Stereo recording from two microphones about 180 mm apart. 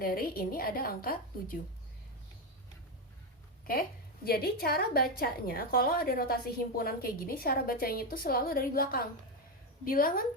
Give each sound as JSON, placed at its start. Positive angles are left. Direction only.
{"t": 0.0, "sound": "a woman's voice", "side_deg": 55}
{"t": 3.7, "sound": "a woman's voice", "side_deg": 55}